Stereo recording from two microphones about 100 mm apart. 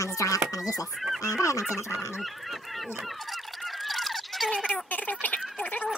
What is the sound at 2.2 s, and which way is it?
Goose, centre (ahead or behind).